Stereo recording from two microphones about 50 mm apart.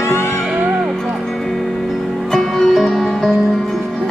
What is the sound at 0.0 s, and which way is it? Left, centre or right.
Music, left.